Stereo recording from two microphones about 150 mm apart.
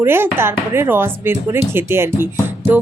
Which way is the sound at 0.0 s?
15° right (ahead or behind).